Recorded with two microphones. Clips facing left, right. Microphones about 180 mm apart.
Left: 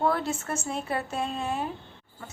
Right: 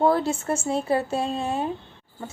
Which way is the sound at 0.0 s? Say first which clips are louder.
Right 6 dB; 30° right (ahead or behind).